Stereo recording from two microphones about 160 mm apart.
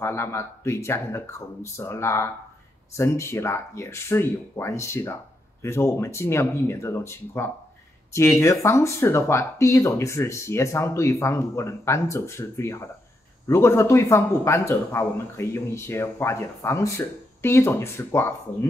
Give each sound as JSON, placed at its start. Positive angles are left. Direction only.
{"t": 0.0, "sound": "speech", "side_deg": 15}